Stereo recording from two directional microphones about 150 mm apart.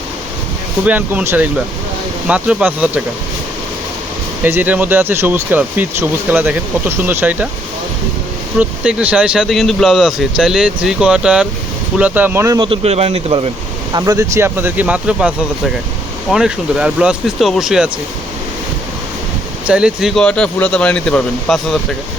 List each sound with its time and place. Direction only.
0.9 s speech: 10° right (ahead or behind)
4.4 s speech: 15° right (ahead or behind)
8.5 s speech: 10° right (ahead or behind)
12.5 s speech: 35° right (ahead or behind)
13.9 s speech: 25° right (ahead or behind); by 17.9 s 5° right (ahead or behind)
19.6 s speech: 5° right (ahead or behind)